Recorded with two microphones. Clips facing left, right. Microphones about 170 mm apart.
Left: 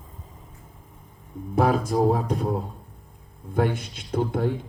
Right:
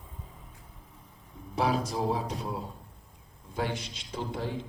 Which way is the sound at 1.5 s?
50° left (ahead or behind).